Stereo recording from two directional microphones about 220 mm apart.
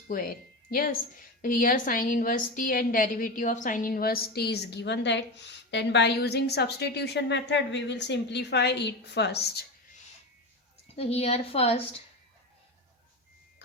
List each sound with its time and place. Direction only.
0.1 s a woman's voice: 40° left (ahead or behind)
10.9 s a woman's voice: 25° left (ahead or behind)